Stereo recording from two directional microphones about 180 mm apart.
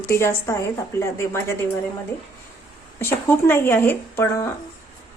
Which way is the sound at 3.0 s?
15° left (ahead or behind).